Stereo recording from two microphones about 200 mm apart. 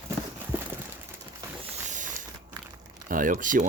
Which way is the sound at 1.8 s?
40° right (ahead or behind).